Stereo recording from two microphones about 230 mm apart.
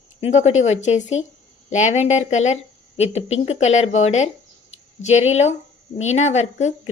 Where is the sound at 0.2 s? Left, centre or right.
Left.